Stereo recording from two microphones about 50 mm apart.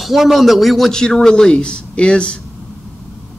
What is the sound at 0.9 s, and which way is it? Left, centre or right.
A man's voice, centre.